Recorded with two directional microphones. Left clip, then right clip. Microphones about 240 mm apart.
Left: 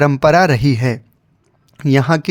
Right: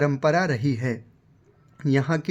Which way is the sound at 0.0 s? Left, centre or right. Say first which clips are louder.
Left 10 dB; left.